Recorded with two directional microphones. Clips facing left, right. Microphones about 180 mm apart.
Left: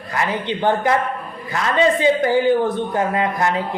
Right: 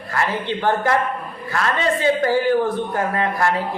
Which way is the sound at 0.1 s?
15° left (ahead or behind).